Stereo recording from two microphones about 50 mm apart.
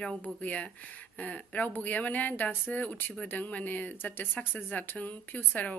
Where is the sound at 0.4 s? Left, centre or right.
Left.